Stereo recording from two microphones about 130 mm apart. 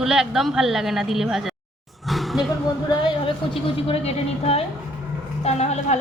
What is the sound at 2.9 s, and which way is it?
A woman's voice, 40° left (ahead or behind).